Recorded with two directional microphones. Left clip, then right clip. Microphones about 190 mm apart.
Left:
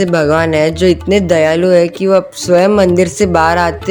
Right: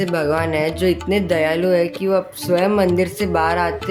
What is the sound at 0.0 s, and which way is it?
Speech, 35° left (ahead or behind).